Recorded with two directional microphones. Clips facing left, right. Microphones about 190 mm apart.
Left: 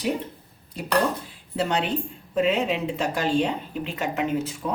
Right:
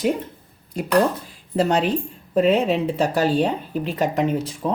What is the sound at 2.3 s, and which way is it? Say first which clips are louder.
Speech: right 5 dB; 40° right (ahead or behind).